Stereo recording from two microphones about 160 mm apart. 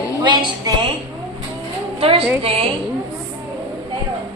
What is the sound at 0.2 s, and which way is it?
Speech, 30° right (ahead or behind).